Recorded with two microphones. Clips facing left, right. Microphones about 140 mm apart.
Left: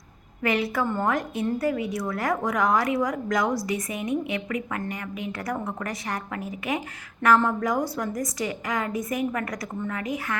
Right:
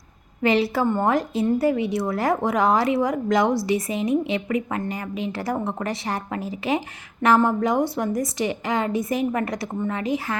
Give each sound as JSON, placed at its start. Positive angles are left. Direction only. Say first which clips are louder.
{"t": 0.4, "sound": "a woman's voice", "louder": "right 5 dB", "side_deg": -30}